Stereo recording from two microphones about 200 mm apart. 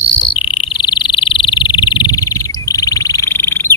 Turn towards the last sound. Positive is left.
turn(degrees=10)  # may be behind; listen again after turning